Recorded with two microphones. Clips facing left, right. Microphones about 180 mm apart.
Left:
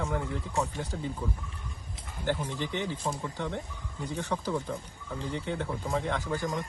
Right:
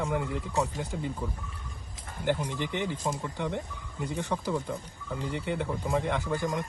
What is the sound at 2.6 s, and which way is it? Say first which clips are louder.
Speech: right 1 dB; 15° right (ahead or behind).